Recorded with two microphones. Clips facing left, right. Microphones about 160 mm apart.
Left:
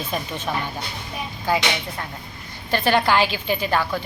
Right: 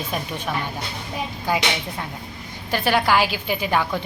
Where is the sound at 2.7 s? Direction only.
10° right (ahead or behind).